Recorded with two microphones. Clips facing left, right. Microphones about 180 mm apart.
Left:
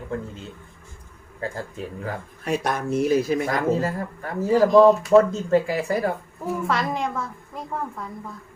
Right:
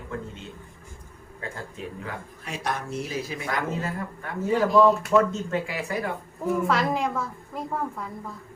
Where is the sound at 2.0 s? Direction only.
50° left (ahead or behind).